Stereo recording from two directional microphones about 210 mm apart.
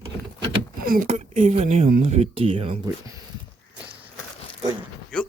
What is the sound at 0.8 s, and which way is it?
Speech, 40° right (ahead or behind).